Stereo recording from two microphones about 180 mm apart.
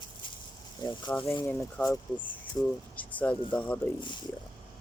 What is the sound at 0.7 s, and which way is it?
Speech, 25° left (ahead or behind).